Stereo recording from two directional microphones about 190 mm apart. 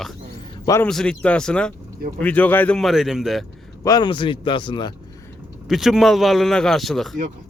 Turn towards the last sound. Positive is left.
turn(degrees=0)  # may be behind; listen again after turning